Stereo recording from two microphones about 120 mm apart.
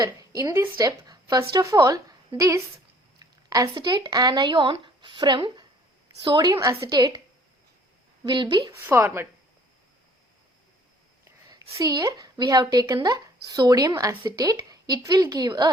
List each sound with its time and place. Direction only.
0.2 s speech: 30° right (ahead or behind)
8.2 s speech: 40° right (ahead or behind)
8.8 s a woman's voice: 15° right (ahead or behind)
11.7 s speech: 30° right (ahead or behind)